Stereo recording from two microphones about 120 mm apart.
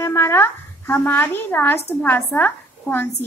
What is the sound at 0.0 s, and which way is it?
A woman's voice, 20° left (ahead or behind).